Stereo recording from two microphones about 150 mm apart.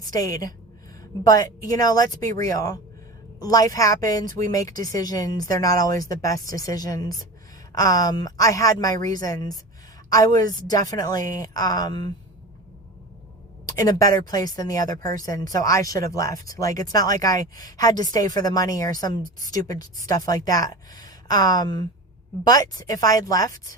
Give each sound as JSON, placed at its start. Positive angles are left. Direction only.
{"t": 0.1, "sound": "a woman's voice", "side_deg": 25}
{"t": 13.7, "sound": "a woman's voice", "side_deg": 25}